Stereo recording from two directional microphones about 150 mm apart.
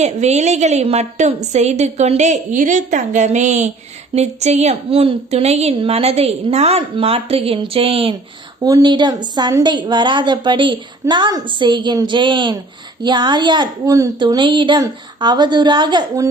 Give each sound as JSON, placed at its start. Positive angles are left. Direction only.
{"t": 0.0, "sound": "a woman's voice", "side_deg": -50}
{"t": 8.6, "sound": "a woman's voice", "side_deg": -25}